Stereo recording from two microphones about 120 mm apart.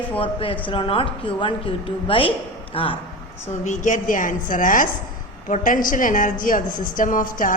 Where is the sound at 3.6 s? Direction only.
90° left.